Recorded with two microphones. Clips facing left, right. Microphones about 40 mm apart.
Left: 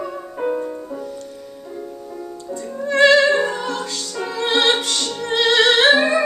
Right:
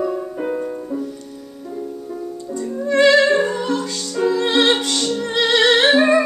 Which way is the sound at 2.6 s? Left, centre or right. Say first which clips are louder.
Even; centre.